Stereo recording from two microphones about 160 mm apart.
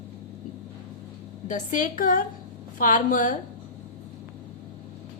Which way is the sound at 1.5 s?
55° left (ahead or behind).